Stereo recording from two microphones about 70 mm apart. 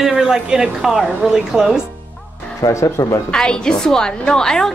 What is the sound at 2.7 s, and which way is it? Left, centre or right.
Speech, left.